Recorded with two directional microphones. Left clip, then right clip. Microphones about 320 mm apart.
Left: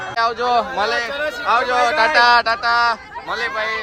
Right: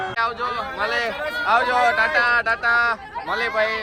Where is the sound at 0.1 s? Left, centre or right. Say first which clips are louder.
Left 11 dB; centre.